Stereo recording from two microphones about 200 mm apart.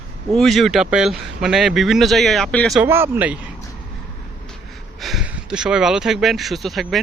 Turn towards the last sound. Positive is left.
turn(degrees=0)  # may be behind; listen again after turning